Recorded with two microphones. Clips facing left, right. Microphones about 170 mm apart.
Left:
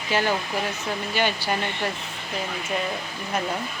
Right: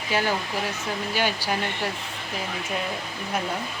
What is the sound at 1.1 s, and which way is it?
Speech, 5° right (ahead or behind).